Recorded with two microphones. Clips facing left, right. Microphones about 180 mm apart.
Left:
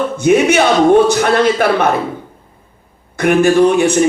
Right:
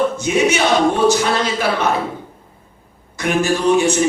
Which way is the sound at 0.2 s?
55° left (ahead or behind).